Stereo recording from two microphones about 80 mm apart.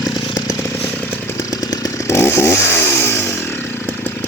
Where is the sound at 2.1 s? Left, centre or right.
Left.